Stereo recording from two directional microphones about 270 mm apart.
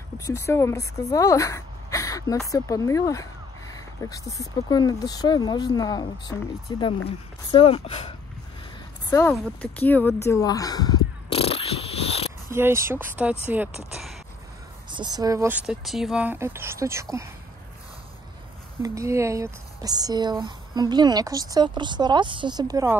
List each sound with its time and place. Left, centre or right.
0.2 s speech: centre
9.1 s speech: centre
11.2 s insect: left
12.5 s speech: centre
14.9 s speech: centre
18.8 s speech: centre